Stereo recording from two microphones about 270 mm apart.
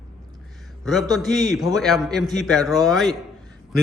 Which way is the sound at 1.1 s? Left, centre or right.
Centre.